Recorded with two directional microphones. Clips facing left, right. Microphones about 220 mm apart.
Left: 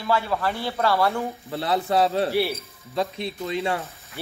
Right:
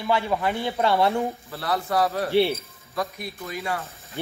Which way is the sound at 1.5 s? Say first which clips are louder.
Left 6 dB; 25° left (ahead or behind).